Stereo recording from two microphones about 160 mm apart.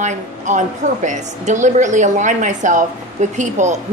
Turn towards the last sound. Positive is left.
turn(degrees=-50)  # may be behind; listen again after turning